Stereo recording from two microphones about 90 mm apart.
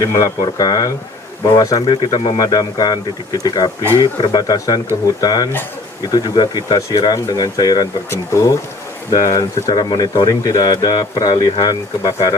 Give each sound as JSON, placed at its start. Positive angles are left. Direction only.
{"t": 0.0, "sound": "speech", "side_deg": 35}
{"t": 0.4, "sound": "speech", "side_deg": 45}
{"t": 8.1, "sound": "speech", "side_deg": 35}